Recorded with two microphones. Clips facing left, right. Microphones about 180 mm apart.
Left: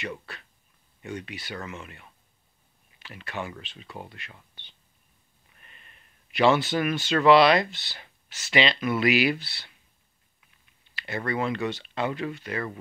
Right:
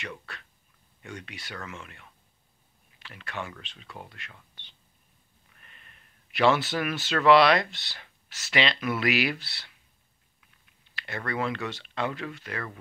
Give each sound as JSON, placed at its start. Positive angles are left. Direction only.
{"t": 1.2, "sound": "speech", "side_deg": 5}
{"t": 6.3, "sound": "speech", "side_deg": 0}
{"t": 11.0, "sound": "speech", "side_deg": 5}